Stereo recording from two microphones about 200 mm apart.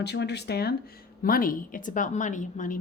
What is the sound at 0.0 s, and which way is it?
A woman's voice, 55° left (ahead or behind).